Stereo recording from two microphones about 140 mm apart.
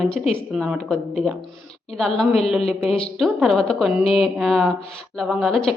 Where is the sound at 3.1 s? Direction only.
Centre (ahead or behind).